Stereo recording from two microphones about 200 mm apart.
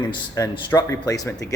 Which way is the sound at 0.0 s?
20° left (ahead or behind).